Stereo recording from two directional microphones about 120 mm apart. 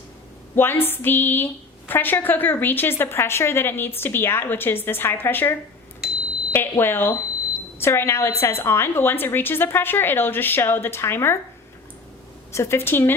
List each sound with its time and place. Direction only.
0.5 s a woman's voice: 20° left (ahead or behind)
6.0 s a sound: 5° right (ahead or behind)
6.5 s a woman's voice: 20° left (ahead or behind)
12.5 s a woman's voice: 20° left (ahead or behind)